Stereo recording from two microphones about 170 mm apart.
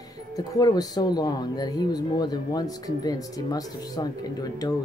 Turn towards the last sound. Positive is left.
turn(degrees=20)  # may be behind; listen again after turning